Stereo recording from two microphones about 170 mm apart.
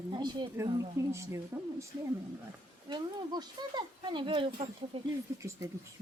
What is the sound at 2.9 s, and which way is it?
Speech, 25° right (ahead or behind).